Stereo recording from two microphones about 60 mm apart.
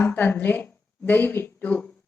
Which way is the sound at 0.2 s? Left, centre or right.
Left.